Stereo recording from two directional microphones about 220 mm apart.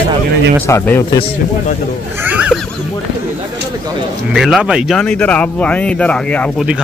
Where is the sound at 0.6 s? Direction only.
10° left (ahead or behind).